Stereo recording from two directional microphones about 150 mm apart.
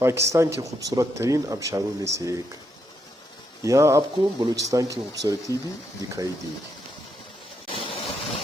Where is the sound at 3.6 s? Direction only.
20° right (ahead or behind).